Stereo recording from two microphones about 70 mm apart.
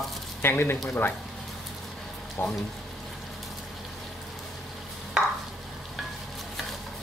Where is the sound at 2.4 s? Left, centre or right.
Left.